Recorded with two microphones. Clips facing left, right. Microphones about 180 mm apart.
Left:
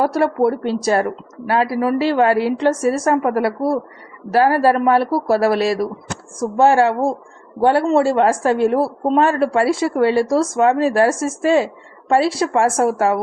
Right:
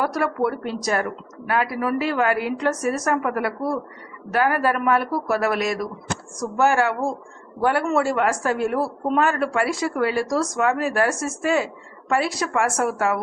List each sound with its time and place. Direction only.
0.0 s a man's voice: 30° left (ahead or behind)